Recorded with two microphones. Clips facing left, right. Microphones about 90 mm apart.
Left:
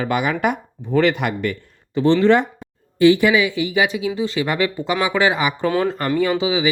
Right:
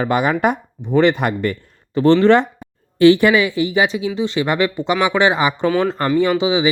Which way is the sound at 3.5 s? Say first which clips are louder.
Right 2 dB; 30° right (ahead or behind).